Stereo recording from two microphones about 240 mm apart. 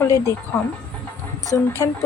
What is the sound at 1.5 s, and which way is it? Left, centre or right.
Speech, centre.